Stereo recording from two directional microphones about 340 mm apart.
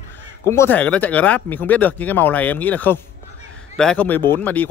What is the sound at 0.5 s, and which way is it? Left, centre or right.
Speech, centre.